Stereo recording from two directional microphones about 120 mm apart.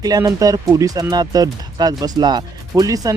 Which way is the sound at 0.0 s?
30° right (ahead or behind).